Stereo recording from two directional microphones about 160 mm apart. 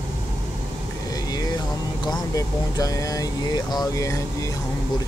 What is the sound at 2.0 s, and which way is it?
Speech, 20° left (ahead or behind).